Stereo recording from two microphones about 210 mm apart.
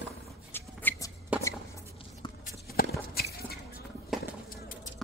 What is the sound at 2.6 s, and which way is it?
Clip-clop, 45° left (ahead or behind).